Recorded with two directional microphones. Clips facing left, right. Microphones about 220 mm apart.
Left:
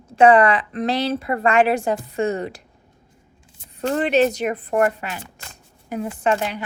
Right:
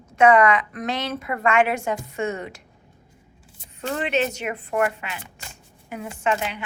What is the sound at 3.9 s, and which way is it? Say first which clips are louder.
A woman's voice: left 6 dB; 35° left (ahead or behind).